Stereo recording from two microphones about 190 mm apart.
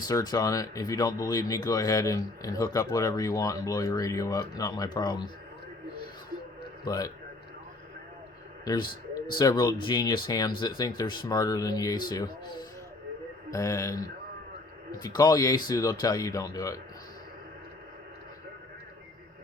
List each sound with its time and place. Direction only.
0.1 s speech: 20° left (ahead or behind)
6.8 s speech: 20° left (ahead or behind)
8.6 s speech: 20° left (ahead or behind)
15.0 s speech: 20° left (ahead or behind)